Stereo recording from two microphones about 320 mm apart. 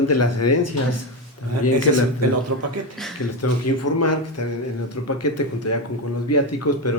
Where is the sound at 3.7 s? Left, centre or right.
Left.